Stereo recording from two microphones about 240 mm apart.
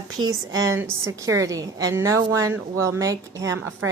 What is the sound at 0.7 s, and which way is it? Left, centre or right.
A woman's voice, centre.